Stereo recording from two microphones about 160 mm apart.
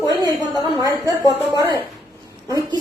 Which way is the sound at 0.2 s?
25° right (ahead or behind).